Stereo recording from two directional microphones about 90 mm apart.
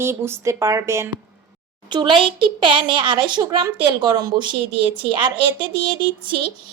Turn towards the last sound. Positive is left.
turn(degrees=-60)  # may be behind; listen again after turning